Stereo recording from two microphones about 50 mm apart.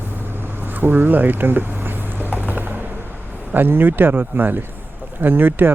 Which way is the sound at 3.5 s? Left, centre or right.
Right.